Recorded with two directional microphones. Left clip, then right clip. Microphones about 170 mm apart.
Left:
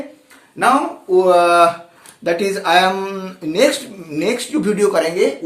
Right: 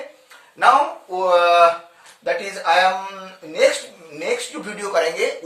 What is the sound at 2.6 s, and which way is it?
A man's voice, 45° left (ahead or behind).